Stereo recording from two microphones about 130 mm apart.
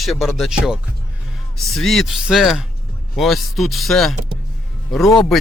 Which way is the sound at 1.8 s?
Centre (ahead or behind).